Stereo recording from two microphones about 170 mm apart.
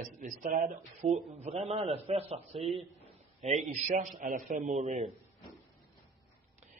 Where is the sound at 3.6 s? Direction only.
45° right (ahead or behind).